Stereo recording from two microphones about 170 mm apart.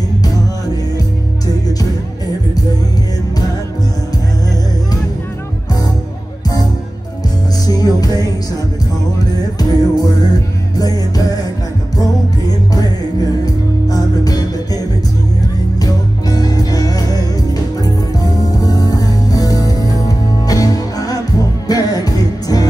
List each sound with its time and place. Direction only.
7.6 s music: 20° left (ahead or behind)
9.6 s music: 20° left (ahead or behind)
13.8 s music: 20° left (ahead or behind)
15.8 s music: 20° left (ahead or behind)